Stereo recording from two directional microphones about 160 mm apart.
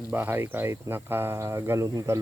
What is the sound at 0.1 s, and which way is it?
Speech, 10° right (ahead or behind).